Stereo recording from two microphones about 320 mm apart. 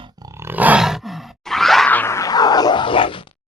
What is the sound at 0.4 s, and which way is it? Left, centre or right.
Groan, centre.